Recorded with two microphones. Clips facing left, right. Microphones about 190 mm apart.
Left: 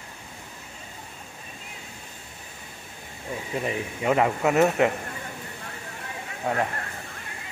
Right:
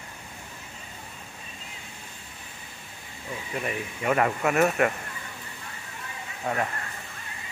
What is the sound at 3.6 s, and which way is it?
Speech, 20° left (ahead or behind).